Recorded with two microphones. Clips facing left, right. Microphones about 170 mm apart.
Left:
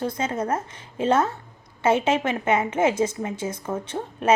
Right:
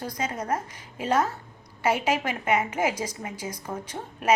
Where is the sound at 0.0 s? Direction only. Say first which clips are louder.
Left 5 dB; 25° left (ahead or behind).